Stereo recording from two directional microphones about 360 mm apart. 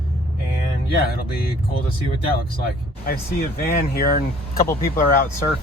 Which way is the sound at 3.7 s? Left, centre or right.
Left.